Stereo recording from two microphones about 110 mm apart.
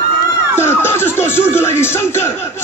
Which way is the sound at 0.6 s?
20° left (ahead or behind).